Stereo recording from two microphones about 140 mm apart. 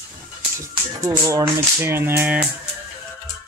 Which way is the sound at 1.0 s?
25° right (ahead or behind).